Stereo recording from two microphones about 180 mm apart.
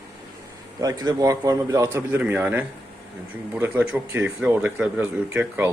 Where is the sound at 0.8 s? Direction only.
20° right (ahead or behind).